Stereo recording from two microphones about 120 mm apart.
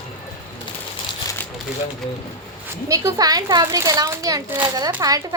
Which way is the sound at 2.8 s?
30° right (ahead or behind).